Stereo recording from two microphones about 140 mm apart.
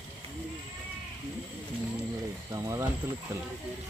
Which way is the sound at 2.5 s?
20° right (ahead or behind).